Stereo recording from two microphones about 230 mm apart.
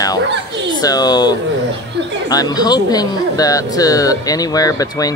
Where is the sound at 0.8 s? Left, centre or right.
Centre.